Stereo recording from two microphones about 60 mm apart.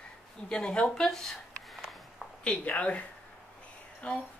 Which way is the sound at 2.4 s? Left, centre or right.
Centre.